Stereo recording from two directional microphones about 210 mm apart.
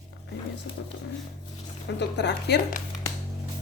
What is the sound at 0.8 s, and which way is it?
Speech, 60° left (ahead or behind).